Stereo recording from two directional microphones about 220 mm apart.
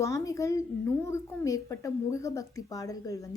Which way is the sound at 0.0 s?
15° left (ahead or behind).